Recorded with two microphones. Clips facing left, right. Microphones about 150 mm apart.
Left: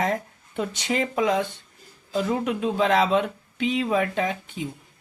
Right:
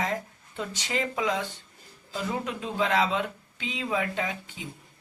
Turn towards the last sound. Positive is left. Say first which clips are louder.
# left 6 dB
turn(degrees=60)  # may be behind; listen again after turning